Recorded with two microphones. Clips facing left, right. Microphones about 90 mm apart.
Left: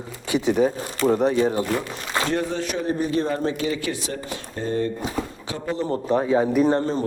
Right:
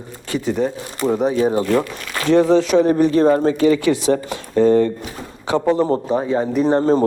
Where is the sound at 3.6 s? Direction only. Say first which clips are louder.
Right 11 dB; 75° right (ahead or behind); by 4.9 s 90° right.